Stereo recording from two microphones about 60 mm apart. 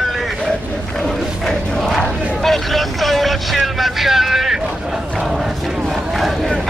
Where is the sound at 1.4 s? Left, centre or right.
Centre.